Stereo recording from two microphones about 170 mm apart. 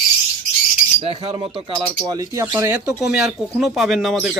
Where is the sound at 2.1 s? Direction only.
20° right (ahead or behind).